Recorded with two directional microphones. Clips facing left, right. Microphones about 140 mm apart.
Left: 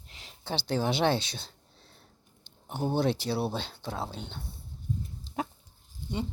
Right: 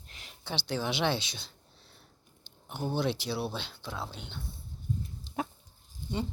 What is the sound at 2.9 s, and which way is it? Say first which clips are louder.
Speech: left 3 dB; 45° left (ahead or behind).